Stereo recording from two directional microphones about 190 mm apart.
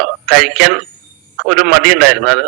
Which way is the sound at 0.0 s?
Centre (ahead or behind).